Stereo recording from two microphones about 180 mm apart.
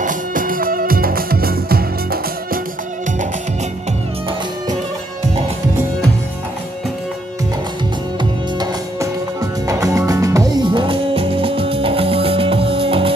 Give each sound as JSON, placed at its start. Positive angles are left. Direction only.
{"t": 0.0, "sound": "music", "side_deg": -50}
{"t": 9.7, "sound": "music", "side_deg": -20}